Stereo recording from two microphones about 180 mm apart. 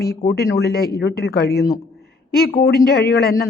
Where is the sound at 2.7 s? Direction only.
65° left (ahead or behind).